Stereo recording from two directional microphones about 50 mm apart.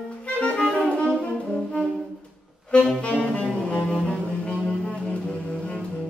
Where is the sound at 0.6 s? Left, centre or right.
Centre.